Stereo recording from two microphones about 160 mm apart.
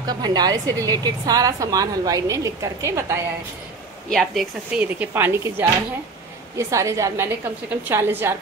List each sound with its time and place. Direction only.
0.0 s a woman's voice: 25° right (ahead or behind)
4.1 s a woman's voice: centre (ahead or behind)
4.8 s a woman's voice: 10° right (ahead or behind)